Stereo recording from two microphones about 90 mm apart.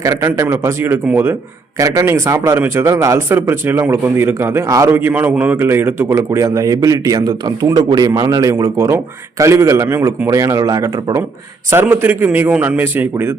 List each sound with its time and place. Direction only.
0.0 s a man's voice: 30° right (ahead or behind)
11.7 s a man's voice: 25° right (ahead or behind)